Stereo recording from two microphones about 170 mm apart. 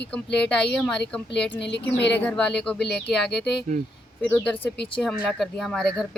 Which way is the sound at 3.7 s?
45° right (ahead or behind).